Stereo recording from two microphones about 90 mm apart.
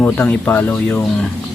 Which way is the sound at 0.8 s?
10° left (ahead or behind).